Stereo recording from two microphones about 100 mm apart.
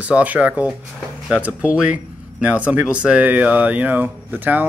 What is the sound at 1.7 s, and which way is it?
Speech, 15° right (ahead or behind).